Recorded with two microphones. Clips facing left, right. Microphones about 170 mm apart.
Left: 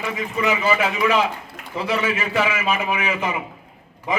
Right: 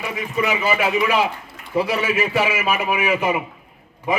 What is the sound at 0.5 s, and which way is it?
A man's voice, 15° right (ahead or behind).